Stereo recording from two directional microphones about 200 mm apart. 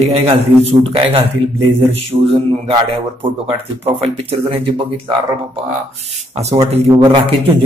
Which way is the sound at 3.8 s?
30° right (ahead or behind).